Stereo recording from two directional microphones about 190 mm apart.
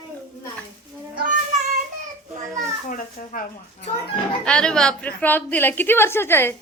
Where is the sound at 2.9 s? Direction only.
45° left (ahead or behind).